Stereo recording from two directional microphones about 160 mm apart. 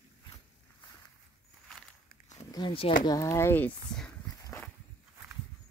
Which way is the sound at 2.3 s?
25° left (ahead or behind).